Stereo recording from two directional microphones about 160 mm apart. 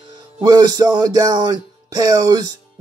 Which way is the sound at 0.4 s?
25° right (ahead or behind).